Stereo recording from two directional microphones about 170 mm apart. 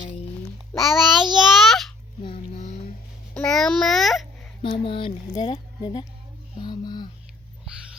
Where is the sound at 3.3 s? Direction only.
5° left (ahead or behind).